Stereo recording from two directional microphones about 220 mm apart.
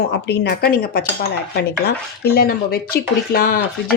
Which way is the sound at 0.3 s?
45° left (ahead or behind).